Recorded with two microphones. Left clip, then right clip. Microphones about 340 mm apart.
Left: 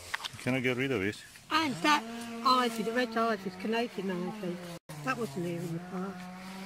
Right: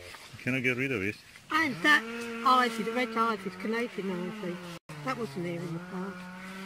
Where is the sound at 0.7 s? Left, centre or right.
Left.